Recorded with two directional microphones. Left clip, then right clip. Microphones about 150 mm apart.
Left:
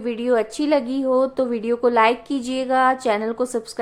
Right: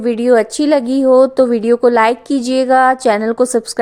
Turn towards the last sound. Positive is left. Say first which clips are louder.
# right 10 dB
turn(degrees=-45)  # may be behind; listen again after turning